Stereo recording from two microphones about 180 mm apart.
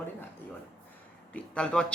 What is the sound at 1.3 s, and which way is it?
Speech, 5° left (ahead or behind).